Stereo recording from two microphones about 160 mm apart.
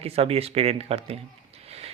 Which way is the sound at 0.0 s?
40° right (ahead or behind).